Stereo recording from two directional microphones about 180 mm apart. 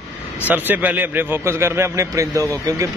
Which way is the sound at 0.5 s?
10° right (ahead or behind).